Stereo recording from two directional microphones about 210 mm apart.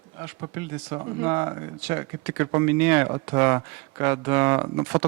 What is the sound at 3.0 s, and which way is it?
Speech, 20° right (ahead or behind).